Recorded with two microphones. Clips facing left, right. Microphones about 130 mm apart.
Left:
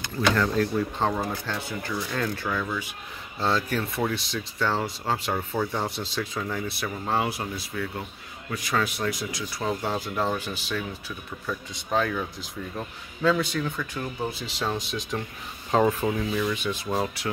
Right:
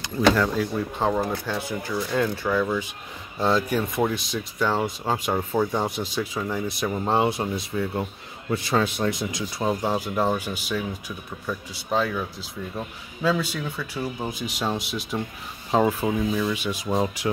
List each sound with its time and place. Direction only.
0.4 s speech: 5° right (ahead or behind)
6.8 s speech: 25° right (ahead or behind)